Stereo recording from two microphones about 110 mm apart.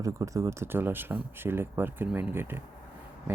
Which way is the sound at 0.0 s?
30° right (ahead or behind).